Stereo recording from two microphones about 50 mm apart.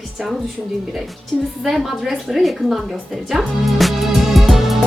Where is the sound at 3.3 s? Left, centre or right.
Centre.